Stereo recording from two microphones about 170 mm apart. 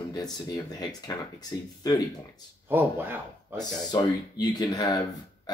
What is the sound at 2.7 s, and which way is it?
Speech, 10° right (ahead or behind).